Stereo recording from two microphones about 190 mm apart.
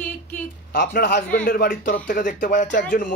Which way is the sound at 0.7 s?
50° left (ahead or behind).